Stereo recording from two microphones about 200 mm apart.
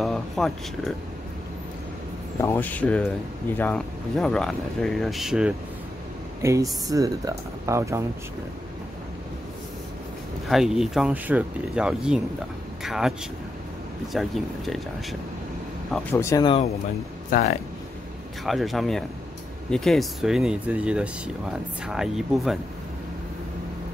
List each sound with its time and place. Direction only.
0.0 s speech: centre (ahead or behind)
2.4 s speech: 10° left (ahead or behind)
6.4 s speech: 15° right (ahead or behind)
10.5 s speech: centre (ahead or behind)
14.1 s speech: centre (ahead or behind)
15.9 s speech: 10° left (ahead or behind)
17.3 s speech: 35° left (ahead or behind)
18.4 s speech: centre (ahead or behind)